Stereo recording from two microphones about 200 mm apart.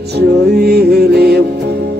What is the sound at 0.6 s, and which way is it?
Music, 50° right (ahead or behind).